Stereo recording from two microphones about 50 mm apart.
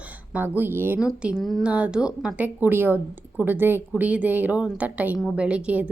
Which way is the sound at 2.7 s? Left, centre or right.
Right.